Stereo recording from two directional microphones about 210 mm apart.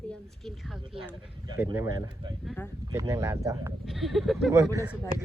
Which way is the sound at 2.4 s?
5° left (ahead or behind).